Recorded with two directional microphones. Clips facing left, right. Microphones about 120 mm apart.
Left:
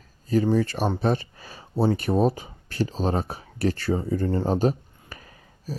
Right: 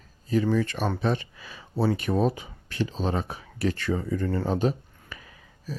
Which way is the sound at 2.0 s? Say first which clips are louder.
Left 3 dB; 40° left (ahead or behind).